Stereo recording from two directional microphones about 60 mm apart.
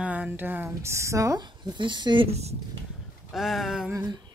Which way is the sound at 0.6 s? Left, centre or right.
Right.